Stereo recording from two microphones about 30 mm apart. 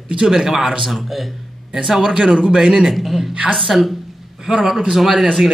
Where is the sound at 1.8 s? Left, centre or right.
Right.